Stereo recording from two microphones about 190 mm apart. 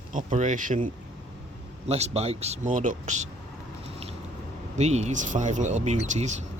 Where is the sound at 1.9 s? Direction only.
35° right (ahead or behind).